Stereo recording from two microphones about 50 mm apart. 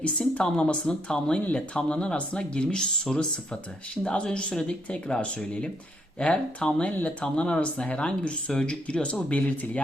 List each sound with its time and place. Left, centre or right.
0.0 s speech: left